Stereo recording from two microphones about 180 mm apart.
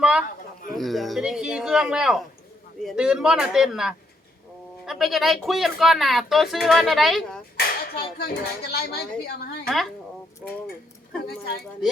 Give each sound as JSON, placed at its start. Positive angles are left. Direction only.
{"t": 0.0, "sound": "speech", "side_deg": -5}
{"t": 7.5, "sound": "a woman's voice", "side_deg": 65}
{"t": 9.6, "sound": "speech", "side_deg": 0}
{"t": 11.3, "sound": "speech", "side_deg": 60}